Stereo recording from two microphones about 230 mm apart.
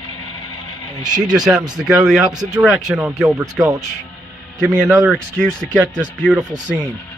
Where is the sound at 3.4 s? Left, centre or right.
Centre.